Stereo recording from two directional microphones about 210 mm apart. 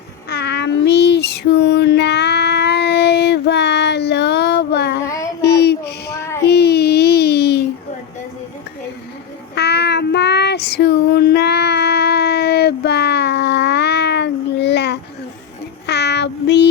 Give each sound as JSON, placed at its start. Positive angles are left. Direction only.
{"t": 0.3, "sound": "child singing", "side_deg": 50}
{"t": 5.0, "sound": "child singing", "side_deg": 15}
{"t": 5.4, "sound": "child singing", "side_deg": 50}
{"t": 6.4, "sound": "a sound", "side_deg": 50}
{"t": 9.6, "sound": "child singing", "side_deg": 55}